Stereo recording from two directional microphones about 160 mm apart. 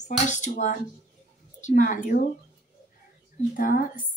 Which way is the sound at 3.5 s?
60° left (ahead or behind).